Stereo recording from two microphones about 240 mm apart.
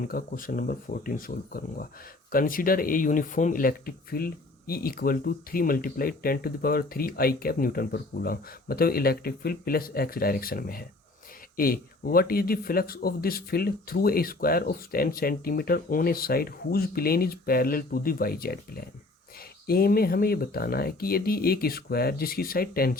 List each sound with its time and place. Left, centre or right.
0.0 s speech: left